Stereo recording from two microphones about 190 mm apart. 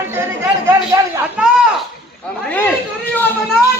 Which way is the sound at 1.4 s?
5° right (ahead or behind).